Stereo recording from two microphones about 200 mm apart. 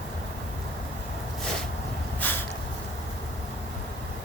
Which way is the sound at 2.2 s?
10° left (ahead or behind).